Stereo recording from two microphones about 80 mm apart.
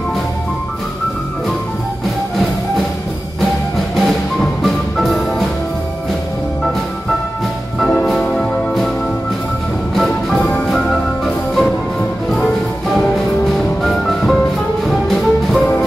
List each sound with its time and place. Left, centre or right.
3.9 s music: centre
7.8 s music: centre
9.9 s music: centre
13.6 s music: centre